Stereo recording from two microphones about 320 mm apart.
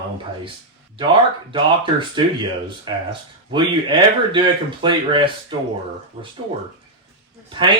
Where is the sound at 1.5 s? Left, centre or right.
Centre.